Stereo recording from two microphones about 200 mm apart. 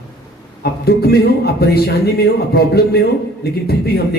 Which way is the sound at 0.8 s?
55° left (ahead or behind).